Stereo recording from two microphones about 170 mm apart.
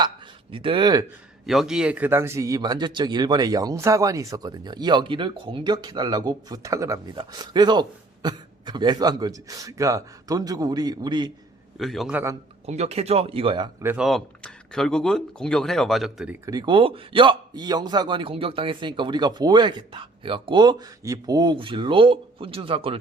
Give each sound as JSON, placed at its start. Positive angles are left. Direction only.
{"t": 0.5, "sound": "a man's voice", "side_deg": -30}
{"t": 1.5, "sound": "a man's voice", "side_deg": 0}
{"t": 11.8, "sound": "speech", "side_deg": 0}
{"t": 12.1, "sound": "a man's voice", "side_deg": -15}
{"t": 12.6, "sound": "speech", "side_deg": -40}
{"t": 13.8, "sound": "speech", "side_deg": -5}
{"t": 16.5, "sound": "a man's voice", "side_deg": -25}